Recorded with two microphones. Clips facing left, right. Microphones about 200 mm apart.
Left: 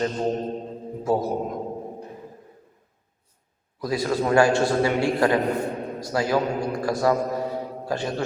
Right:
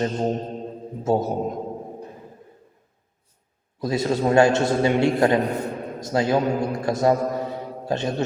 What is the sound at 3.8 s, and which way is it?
A man's voice, 25° right (ahead or behind).